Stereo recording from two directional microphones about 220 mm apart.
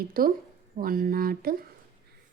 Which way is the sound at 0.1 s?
40° right (ahead or behind).